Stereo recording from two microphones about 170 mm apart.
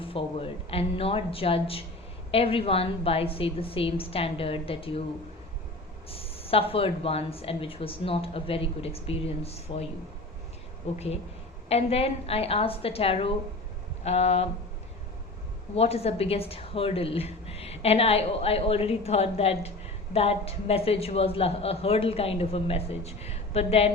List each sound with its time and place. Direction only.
0.0 s a woman's voice: 30° left (ahead or behind)
6.1 s a woman's voice: 35° left (ahead or behind)
10.9 s a woman's voice: 40° left (ahead or behind)
15.7 s a woman's voice: 35° left (ahead or behind)